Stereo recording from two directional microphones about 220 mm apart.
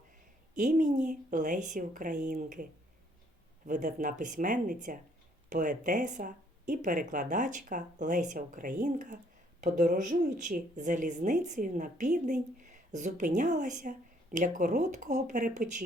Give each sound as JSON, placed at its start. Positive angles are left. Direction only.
{"t": 0.5, "sound": "speech", "side_deg": -35}
{"t": 3.7, "sound": "speech", "side_deg": -35}